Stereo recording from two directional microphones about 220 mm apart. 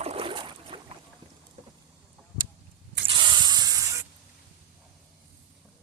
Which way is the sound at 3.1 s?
20° right (ahead or behind).